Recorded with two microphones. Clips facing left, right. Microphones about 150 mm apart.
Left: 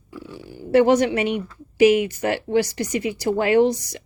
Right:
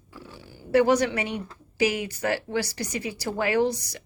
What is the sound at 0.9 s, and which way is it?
Speech, 25° left (ahead or behind).